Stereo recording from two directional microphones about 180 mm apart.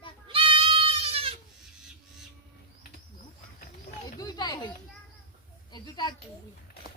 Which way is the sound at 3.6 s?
50° left (ahead or behind).